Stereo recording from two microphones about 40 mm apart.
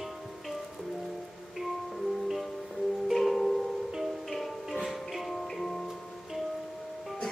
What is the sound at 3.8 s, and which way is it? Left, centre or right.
Music, centre.